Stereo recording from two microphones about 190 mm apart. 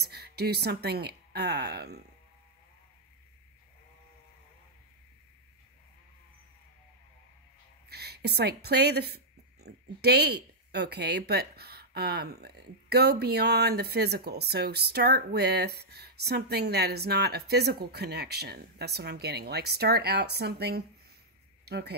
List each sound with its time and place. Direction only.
0.0 s a woman's voice: 60° right (ahead or behind)
7.9 s a woman's voice: 60° right (ahead or behind)